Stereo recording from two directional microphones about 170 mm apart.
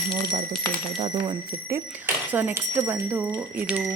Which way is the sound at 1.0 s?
25° right (ahead or behind).